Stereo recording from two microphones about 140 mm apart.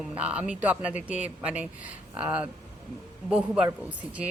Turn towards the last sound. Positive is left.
turn(degrees=-10)  # may be behind; listen again after turning